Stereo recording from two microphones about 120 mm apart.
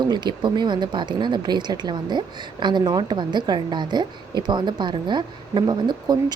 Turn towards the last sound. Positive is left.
turn(degrees=-35)  # may be behind; listen again after turning